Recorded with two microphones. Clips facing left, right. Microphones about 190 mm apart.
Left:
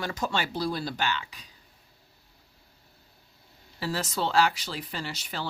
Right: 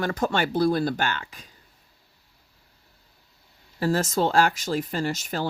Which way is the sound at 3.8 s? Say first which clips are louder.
Right 7 dB; 45° right (ahead or behind).